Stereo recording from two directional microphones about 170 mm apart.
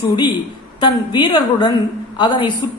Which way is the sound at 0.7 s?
25° left (ahead or behind).